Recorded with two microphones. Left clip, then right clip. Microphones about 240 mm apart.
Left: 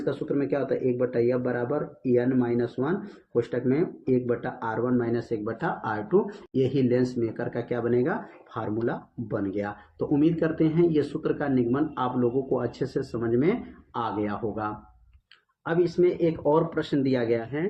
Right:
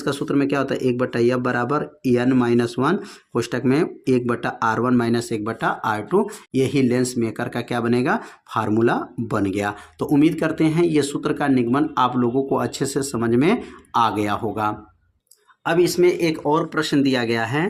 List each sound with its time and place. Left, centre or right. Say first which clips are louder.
0.0 s speech: right 6 dB; right